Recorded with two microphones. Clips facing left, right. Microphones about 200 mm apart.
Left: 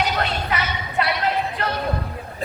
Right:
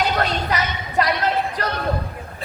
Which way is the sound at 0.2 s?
40° right (ahead or behind).